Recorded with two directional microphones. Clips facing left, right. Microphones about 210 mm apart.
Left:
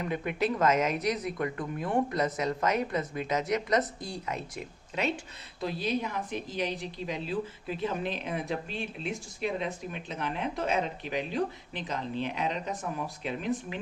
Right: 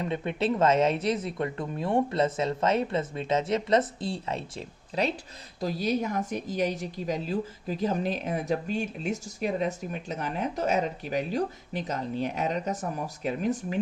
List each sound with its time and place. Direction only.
0.0 s speech: 25° right (ahead or behind)
5.5 s a woman's voice: 45° right (ahead or behind)